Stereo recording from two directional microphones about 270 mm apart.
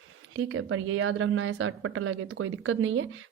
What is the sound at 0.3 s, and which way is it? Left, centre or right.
A woman's voice, right.